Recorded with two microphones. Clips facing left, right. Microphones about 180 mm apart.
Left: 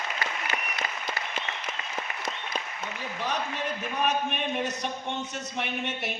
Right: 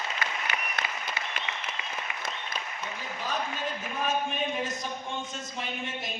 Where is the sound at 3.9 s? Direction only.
70° left (ahead or behind).